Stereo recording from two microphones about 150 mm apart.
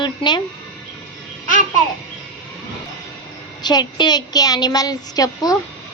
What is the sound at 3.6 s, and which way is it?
A woman's voice, 30° left (ahead or behind).